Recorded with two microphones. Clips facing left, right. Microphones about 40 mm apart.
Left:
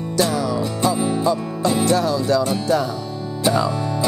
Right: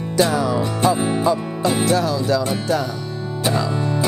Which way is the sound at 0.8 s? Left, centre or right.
Right.